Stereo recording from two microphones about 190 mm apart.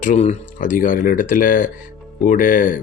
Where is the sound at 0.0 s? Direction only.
40° left (ahead or behind).